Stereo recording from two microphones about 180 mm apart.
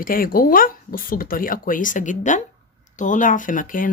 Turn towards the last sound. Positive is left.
turn(degrees=50)  # may be behind; listen again after turning